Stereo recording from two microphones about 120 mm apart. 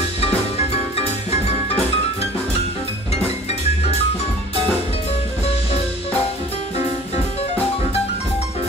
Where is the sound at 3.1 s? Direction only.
60° left (ahead or behind).